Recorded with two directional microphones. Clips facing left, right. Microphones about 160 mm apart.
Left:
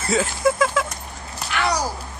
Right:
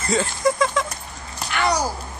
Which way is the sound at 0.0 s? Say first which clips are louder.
Left 1 dB; 5° left (ahead or behind).